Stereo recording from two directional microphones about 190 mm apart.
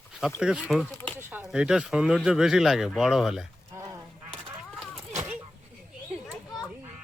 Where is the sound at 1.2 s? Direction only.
10° right (ahead or behind).